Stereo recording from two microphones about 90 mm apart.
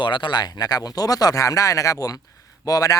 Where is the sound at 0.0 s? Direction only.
60° left (ahead or behind).